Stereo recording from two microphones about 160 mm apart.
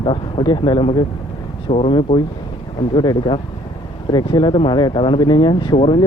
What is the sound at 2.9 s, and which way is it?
Speech, 30° left (ahead or behind).